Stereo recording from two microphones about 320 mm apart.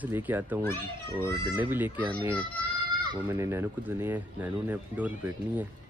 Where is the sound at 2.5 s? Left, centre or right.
Centre.